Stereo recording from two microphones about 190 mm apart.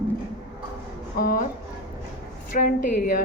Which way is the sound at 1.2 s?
50° left (ahead or behind).